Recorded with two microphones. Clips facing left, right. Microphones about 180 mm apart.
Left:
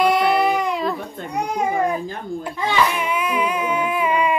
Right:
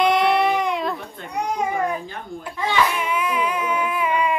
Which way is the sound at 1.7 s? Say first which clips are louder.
Left 3 dB; 35° left (ahead or behind).